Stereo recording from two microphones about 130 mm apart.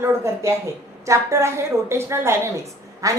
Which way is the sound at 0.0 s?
20° right (ahead or behind).